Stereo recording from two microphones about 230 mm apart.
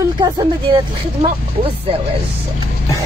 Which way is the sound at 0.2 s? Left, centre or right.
Centre.